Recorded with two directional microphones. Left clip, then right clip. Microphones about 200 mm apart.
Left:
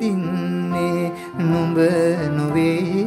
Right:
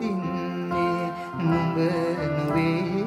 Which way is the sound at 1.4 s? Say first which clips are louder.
Left 7 dB; 60° left (ahead or behind).